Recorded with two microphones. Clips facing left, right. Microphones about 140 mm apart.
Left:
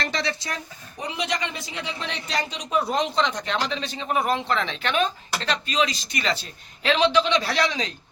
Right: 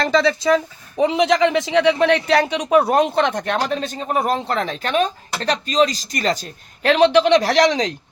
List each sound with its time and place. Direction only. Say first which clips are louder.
0.9 s speech: right 13 dB; 90° right; by 6.5 s 40° right (ahead or behind)
6.8 s a man's voice: right 7 dB; 55° right (ahead or behind); by 7.9 s 75° right (ahead or behind)